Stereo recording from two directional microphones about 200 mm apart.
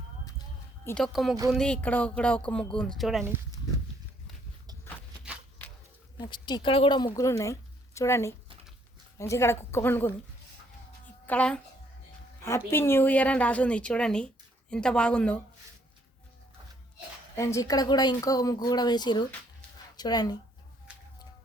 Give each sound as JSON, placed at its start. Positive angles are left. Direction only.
{"t": 0.9, "sound": "speech", "side_deg": 5}
{"t": 5.6, "sound": "a sound", "side_deg": 10}
{"t": 6.1, "sound": "a woman's voice", "side_deg": 20}
{"t": 11.3, "sound": "a woman's voice", "side_deg": 5}
{"t": 17.3, "sound": "speech", "side_deg": 15}